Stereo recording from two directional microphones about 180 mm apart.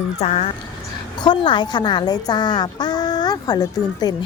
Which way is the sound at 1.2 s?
25° left (ahead or behind).